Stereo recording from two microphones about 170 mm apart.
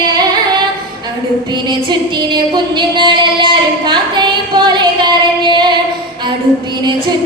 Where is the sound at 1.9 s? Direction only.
25° right (ahead or behind).